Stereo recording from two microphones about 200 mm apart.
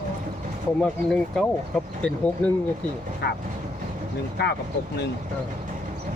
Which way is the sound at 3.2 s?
55° left (ahead or behind).